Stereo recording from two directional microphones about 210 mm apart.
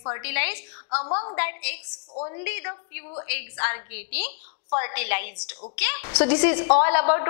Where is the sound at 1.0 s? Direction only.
30° left (ahead or behind).